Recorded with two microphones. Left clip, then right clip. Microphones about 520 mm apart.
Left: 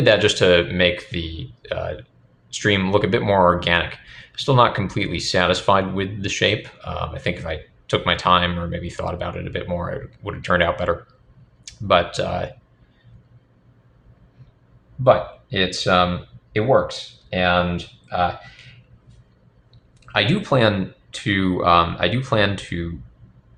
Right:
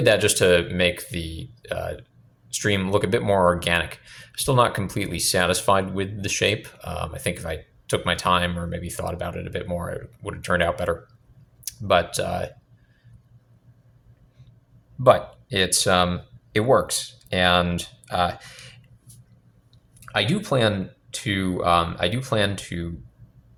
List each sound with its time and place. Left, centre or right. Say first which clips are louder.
0.0 s speech: left 3 dB; right
15.0 s speech: left 1 dB; right
20.1 s speech: left 4 dB; right